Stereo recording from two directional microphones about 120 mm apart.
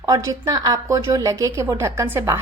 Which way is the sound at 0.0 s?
30° right (ahead or behind).